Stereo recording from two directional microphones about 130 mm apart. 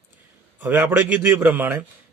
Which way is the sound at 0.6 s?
15° right (ahead or behind).